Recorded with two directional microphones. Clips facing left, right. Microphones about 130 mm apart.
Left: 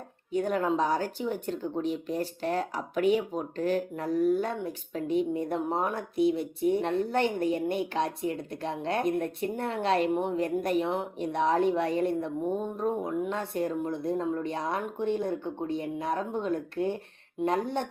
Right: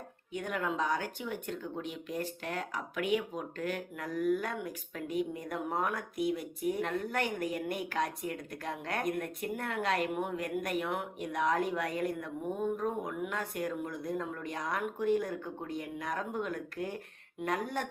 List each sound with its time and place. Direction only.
0.3 s speech: 35° left (ahead or behind)